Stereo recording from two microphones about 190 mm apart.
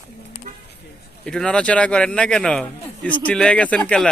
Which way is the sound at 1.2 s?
5° left (ahead or behind).